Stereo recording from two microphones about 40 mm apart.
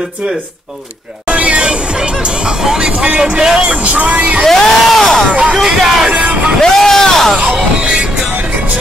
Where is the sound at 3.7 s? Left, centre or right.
Right.